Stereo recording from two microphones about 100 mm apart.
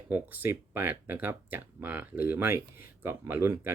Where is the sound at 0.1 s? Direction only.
20° right (ahead or behind).